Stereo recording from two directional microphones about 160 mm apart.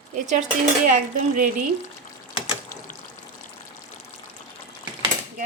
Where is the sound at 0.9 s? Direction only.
55° right (ahead or behind).